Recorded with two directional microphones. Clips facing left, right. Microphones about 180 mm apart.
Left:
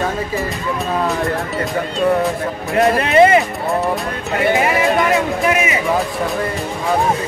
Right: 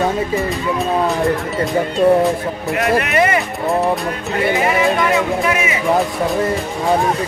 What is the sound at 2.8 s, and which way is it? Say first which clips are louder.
Speech: left 5 dB; 30° left (ahead or behind).